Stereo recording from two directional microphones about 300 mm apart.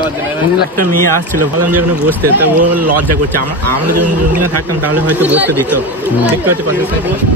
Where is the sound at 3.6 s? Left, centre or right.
Right.